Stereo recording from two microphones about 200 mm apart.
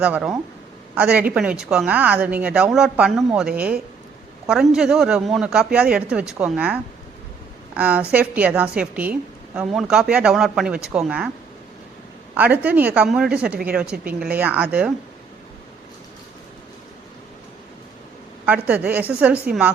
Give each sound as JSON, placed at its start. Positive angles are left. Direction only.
{"t": 0.0, "sound": "a woman's voice", "side_deg": -5}
{"t": 12.3, "sound": "a woman's voice", "side_deg": -5}
{"t": 13.9, "sound": "speech", "side_deg": -45}
{"t": 14.3, "sound": "a woman's voice", "side_deg": -5}
{"t": 18.4, "sound": "a woman's voice", "side_deg": -5}
{"t": 19.5, "sound": "speech", "side_deg": -50}